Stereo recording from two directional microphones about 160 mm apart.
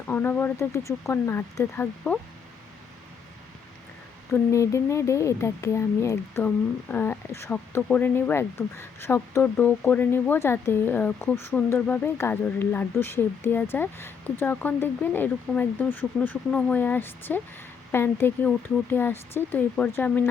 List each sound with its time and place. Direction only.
0.1 s speech: 10° left (ahead or behind)
4.3 s speech: 20° left (ahead or behind)